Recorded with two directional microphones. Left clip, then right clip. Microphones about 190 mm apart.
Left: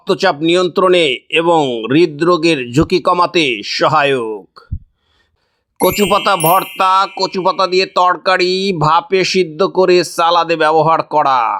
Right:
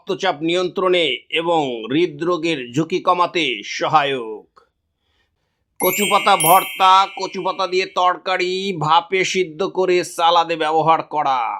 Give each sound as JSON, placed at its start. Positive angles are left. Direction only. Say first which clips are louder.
{"t": 0.0, "sound": "speech", "louder": "left 7 dB", "side_deg": 35}
{"t": 5.8, "sound": "speech", "louder": "left 4 dB", "side_deg": 35}